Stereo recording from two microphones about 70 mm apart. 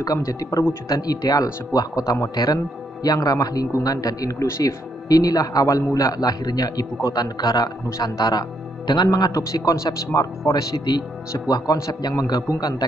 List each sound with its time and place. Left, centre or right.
0.0 s a man's voice: left
2.3 s a man's voice: left